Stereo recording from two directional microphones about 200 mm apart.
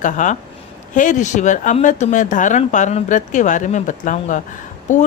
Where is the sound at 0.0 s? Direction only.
40° left (ahead or behind).